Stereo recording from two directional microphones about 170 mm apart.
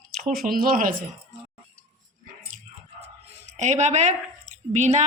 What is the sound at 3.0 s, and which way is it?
Speech, 40° right (ahead or behind).